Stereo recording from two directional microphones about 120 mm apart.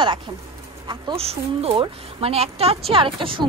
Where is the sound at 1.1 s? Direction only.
55° right (ahead or behind).